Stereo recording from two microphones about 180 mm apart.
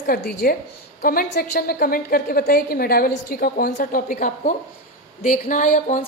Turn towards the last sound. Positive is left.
turn(degrees=45)  # may be behind; listen again after turning